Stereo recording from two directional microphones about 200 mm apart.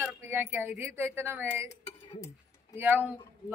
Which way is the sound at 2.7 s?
10° right (ahead or behind).